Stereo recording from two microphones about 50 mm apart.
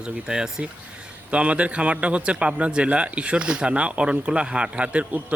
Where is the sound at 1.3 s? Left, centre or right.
Right.